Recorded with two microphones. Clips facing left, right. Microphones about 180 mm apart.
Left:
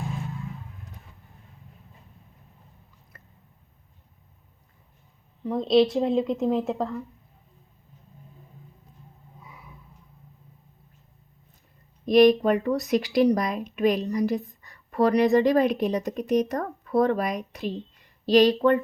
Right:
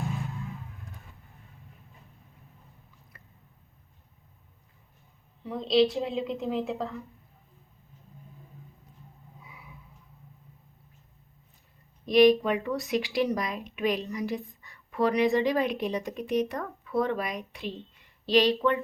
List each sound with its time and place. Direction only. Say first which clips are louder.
5.5 s speech: left 4 dB; 45° left (ahead or behind)
12.0 s speech: left 3 dB; 45° left (ahead or behind)